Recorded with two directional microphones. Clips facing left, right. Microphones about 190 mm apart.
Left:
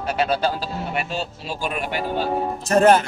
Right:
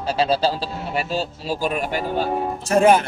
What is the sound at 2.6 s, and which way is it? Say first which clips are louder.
Speech: even; 10° right (ahead or behind).